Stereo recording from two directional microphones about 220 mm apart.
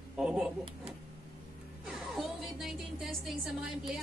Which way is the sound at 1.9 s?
Centre (ahead or behind).